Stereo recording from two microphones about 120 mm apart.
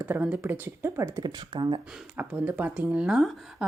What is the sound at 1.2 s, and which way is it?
Speech, 35° right (ahead or behind).